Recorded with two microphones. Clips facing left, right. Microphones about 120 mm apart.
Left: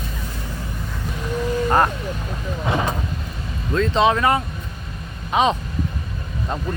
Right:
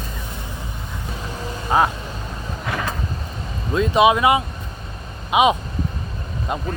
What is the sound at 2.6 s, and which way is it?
Vehicle, 25° left (ahead or behind).